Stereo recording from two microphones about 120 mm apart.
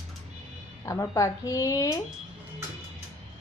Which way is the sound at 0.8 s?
25° left (ahead or behind).